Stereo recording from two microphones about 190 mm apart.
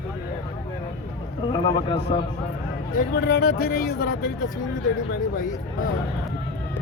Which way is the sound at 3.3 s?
55° left (ahead or behind).